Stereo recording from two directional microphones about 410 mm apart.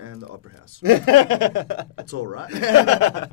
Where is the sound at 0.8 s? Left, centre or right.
Right.